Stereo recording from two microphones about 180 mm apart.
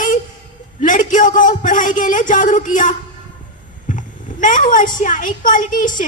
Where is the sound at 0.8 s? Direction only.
45° left (ahead or behind).